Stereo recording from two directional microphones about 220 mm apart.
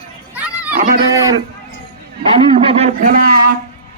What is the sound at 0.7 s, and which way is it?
Livestock, 35° right (ahead or behind).